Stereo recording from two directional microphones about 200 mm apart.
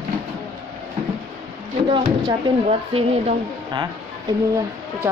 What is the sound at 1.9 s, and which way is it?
Speech, 25° right (ahead or behind).